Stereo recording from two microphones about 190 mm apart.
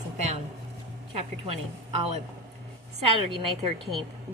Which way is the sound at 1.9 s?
35° right (ahead or behind).